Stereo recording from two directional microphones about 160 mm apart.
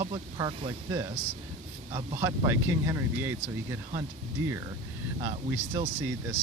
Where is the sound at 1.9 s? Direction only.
20° right (ahead or behind).